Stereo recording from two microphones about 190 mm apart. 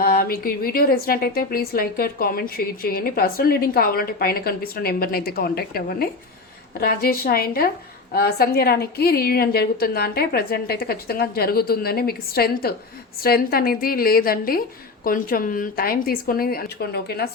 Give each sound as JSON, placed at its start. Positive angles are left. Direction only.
{"t": 0.0, "sound": "a woman's voice", "side_deg": 50}